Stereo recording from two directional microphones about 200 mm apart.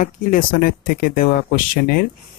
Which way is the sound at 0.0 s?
45° left (ahead or behind).